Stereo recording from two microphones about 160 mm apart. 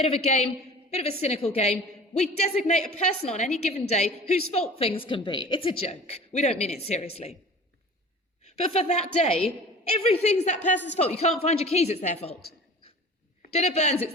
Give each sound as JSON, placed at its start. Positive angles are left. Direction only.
{"t": 0.0, "sound": "a woman's voice", "side_deg": 40}
{"t": 8.4, "sound": "a woman's voice", "side_deg": 40}
{"t": 13.5, "sound": "a man's voice", "side_deg": 45}